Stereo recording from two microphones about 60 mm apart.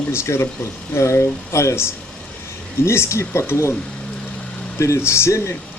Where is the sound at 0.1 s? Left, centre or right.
Left.